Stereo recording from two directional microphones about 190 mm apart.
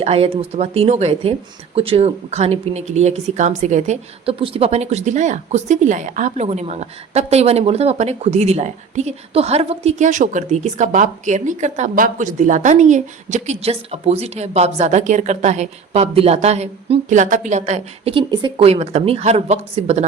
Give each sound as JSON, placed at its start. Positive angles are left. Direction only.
{"t": 0.0, "sound": "speech", "side_deg": -30}